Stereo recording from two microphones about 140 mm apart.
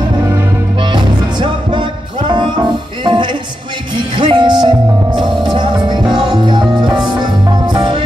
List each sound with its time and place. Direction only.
0.9 s music: 35° right (ahead or behind)